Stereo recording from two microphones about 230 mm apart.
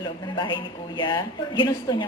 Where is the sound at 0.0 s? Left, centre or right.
Left.